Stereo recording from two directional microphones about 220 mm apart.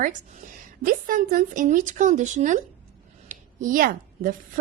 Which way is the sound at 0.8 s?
40° right (ahead or behind).